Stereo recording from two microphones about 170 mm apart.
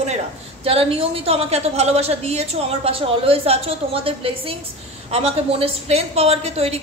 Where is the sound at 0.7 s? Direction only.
35° right (ahead or behind).